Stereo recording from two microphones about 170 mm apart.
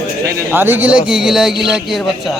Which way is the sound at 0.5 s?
10° right (ahead or behind).